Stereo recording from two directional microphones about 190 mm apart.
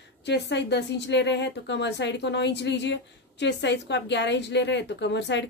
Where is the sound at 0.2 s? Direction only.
65° left (ahead or behind).